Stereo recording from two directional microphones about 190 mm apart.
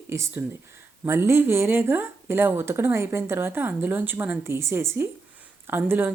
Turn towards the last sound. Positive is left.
turn(degrees=-10)  # may be behind; listen again after turning